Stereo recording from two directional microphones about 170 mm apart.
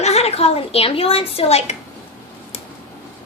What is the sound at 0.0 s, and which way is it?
A child's voice, 40° left (ahead or behind).